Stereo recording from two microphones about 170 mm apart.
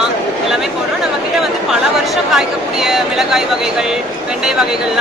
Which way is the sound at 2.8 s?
Centre (ahead or behind).